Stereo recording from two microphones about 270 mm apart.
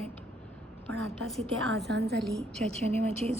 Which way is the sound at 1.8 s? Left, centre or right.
Right.